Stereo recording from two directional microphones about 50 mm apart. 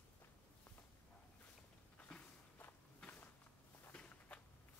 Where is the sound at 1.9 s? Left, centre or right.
Left.